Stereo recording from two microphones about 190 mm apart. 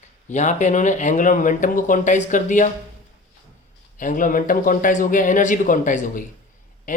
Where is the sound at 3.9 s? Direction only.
45° left (ahead or behind).